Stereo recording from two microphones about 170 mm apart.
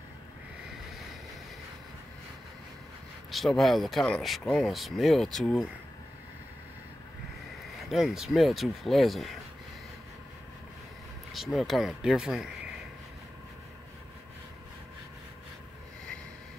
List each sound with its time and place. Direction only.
3.3 s speech: centre (ahead or behind)
7.9 s speech: centre (ahead or behind)
11.3 s speech: centre (ahead or behind)